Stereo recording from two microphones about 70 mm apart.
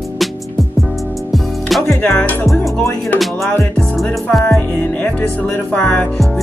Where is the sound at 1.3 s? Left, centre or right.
Centre.